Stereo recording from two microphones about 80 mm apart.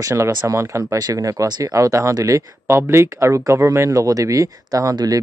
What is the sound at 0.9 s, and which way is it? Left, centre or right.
Speech, right.